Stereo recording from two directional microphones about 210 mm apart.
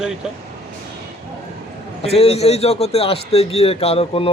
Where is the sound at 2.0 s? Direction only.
30° left (ahead or behind).